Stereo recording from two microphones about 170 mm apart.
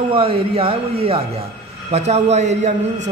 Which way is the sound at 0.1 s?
35° right (ahead or behind).